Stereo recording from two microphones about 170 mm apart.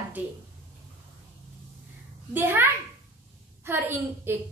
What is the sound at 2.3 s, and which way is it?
A woman's voice, 10° right (ahead or behind).